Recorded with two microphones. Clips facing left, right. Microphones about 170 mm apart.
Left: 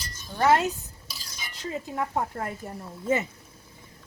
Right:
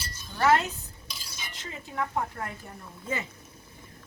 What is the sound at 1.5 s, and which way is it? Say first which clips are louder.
Stir: left 4 dB; 40° left (ahead or behind).